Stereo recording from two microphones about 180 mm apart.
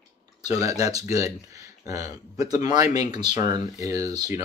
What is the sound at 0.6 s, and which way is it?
Speech, 20° right (ahead or behind).